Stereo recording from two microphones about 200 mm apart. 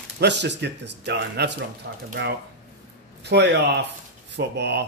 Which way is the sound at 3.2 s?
55° right (ahead or behind).